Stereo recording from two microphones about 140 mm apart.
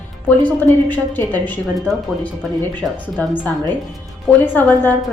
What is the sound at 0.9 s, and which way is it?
Speech, 10° left (ahead or behind).